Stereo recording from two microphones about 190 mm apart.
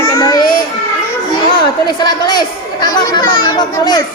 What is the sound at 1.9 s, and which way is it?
A child's voice, 20° left (ahead or behind).